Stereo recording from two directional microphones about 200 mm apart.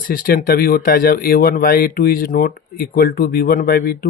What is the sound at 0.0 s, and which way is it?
Speech, 45° left (ahead or behind).